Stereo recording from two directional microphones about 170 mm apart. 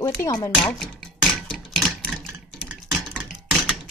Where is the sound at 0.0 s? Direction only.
20° left (ahead or behind).